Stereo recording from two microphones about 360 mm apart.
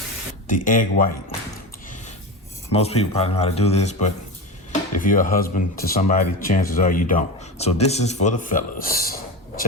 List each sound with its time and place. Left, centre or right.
0.4 s speech: left
2.7 s speech: centre